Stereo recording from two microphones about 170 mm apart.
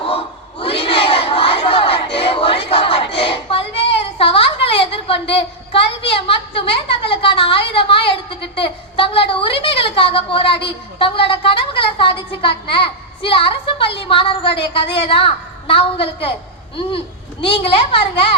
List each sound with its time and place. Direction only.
0.6 s crowd: 35° left (ahead or behind)
5.3 s a woman's voice: 35° left (ahead or behind)
17.4 s a woman's voice: 30° left (ahead or behind)